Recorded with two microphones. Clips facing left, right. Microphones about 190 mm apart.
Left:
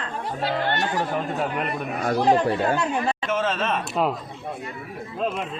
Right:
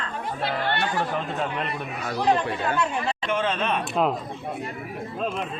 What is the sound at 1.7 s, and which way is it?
Speech, 50° left (ahead or behind).